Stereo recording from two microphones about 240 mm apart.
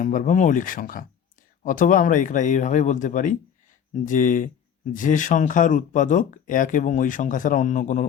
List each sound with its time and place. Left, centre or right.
0.0 s speech: left